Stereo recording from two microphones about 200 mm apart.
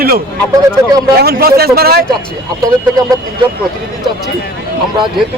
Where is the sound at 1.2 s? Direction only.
50° right (ahead or behind).